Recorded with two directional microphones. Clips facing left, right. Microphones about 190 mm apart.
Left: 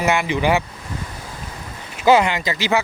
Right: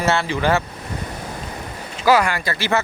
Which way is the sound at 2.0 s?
25° left (ahead or behind).